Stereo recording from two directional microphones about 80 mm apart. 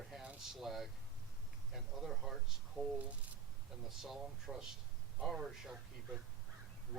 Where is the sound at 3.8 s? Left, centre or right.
Centre.